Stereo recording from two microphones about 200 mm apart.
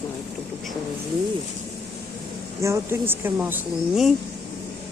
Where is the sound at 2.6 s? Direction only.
10° right (ahead or behind).